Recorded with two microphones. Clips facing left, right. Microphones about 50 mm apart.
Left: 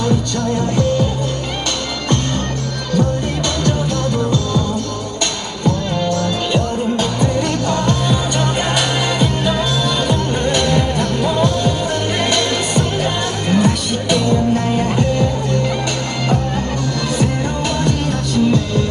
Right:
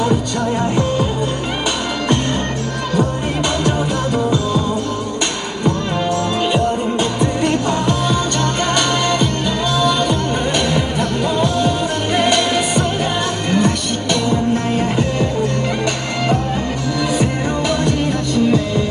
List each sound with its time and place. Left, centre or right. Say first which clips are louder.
0.0 s music: right 1 dB; centre
2.9 s music: left 1 dB; centre
5.7 s music: left 1 dB; centre
8.1 s music: even; centre
17.1 s music: left 1 dB; centre